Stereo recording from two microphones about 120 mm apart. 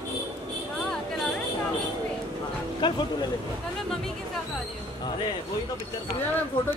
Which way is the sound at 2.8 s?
40° left (ahead or behind).